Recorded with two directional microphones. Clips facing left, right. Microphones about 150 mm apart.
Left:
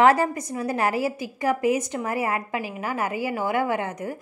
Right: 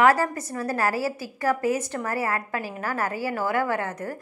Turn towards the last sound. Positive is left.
turn(degrees=15)  # may be behind; listen again after turning